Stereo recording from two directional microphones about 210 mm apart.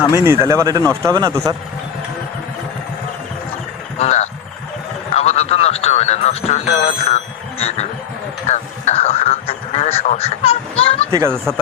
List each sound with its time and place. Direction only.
0.1 s a man's voice: 10° right (ahead or behind)
3.9 s vehicle: 30° left (ahead or behind)
5.1 s a sound: 30° left (ahead or behind)
7.6 s frog: 30° left (ahead or behind)
8.4 s a sound: 35° left (ahead or behind)
11.1 s a man's voice: 15° right (ahead or behind)